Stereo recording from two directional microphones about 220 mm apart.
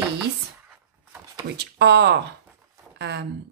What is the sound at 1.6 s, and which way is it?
Speech, 50° right (ahead or behind).